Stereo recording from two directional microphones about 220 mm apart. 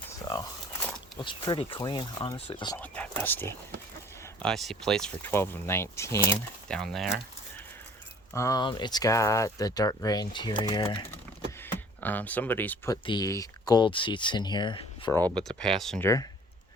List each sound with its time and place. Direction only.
0.2 s a sound: 15° left (ahead or behind)
0.8 s walk: 5° left (ahead or behind)
1.2 s speech: 20° left (ahead or behind)
2.7 s speech: 5° left (ahead or behind)
8.3 s speech: 15° left (ahead or behind)
15.1 s speech: 5° left (ahead or behind)